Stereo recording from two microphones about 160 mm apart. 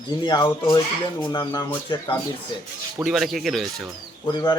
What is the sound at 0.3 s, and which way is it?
Speech, 25° left (ahead or behind).